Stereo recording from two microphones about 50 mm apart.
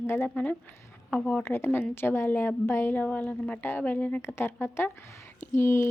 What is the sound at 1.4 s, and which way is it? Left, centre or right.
A woman's voice, left.